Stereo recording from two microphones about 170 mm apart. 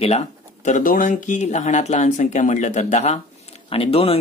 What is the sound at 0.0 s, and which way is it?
Speech, 40° left (ahead or behind).